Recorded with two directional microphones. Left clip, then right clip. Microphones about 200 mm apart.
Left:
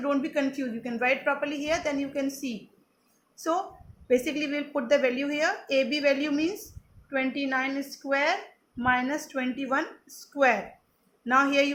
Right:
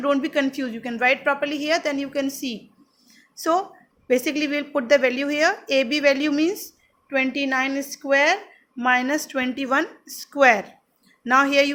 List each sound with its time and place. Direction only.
0.0 s a woman's voice: 40° right (ahead or behind)